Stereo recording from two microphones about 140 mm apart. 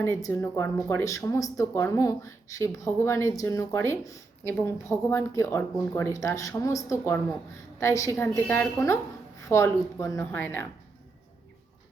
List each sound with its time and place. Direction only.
0.0 s speech: 20° left (ahead or behind)